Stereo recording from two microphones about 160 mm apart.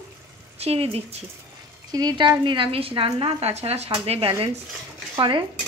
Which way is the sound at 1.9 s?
25° right (ahead or behind).